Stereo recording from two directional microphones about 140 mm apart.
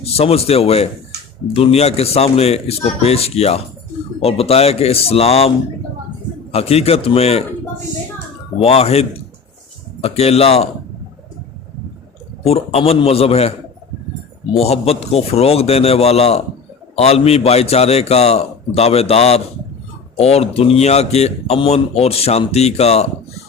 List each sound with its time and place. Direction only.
0.0 s speech: 45° left (ahead or behind)
6.5 s speech: 45° left (ahead or behind)
8.5 s speech: 45° left (ahead or behind)
12.5 s speech: 45° left (ahead or behind)
14.5 s speech: 45° left (ahead or behind)